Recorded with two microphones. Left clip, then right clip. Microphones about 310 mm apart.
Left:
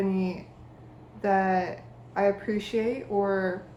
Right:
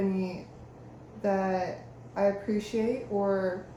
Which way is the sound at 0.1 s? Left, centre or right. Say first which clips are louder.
Left 3 dB; left.